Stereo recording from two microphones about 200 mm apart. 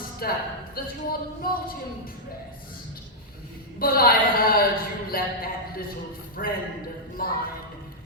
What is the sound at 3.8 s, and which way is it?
Speech, 45° left (ahead or behind).